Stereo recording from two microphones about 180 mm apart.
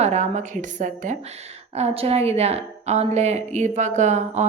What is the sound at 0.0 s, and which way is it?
A woman's voice, 40° right (ahead or behind).